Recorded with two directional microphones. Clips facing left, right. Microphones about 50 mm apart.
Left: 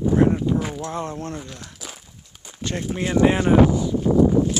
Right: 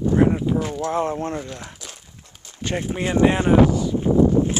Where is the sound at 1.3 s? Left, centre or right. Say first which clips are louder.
Right 4 dB; centre.